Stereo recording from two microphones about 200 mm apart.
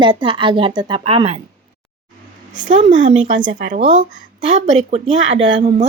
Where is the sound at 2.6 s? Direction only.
40° right (ahead or behind).